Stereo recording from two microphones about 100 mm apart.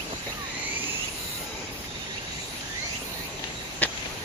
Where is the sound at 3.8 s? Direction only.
20° left (ahead or behind).